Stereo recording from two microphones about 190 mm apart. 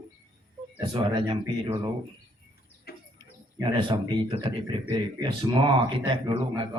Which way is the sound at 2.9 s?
55° left (ahead or behind).